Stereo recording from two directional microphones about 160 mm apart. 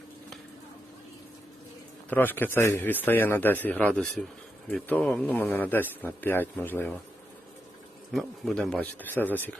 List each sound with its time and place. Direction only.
2.0 s a man's voice: 10° left (ahead or behind)
8.1 s a man's voice: centre (ahead or behind)